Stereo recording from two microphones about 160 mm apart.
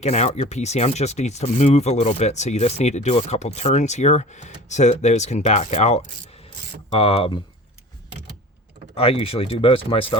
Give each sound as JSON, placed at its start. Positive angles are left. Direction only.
{"t": 0.0, "sound": "speech", "side_deg": 45}
{"t": 9.0, "sound": "speech", "side_deg": 35}